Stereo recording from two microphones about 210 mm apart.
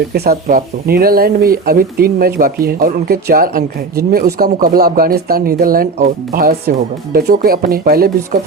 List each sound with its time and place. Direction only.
0.1 s speech: 45° right (ahead or behind)